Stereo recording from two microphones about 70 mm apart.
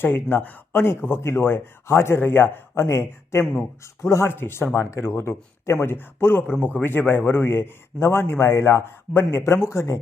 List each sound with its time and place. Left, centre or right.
0.0 s a man's voice: left
2.7 s a man's voice: left